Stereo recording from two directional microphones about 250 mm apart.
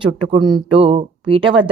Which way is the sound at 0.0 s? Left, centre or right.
Centre.